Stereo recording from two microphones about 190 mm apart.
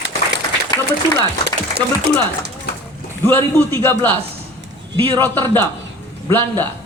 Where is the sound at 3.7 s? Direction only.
10° left (ahead or behind).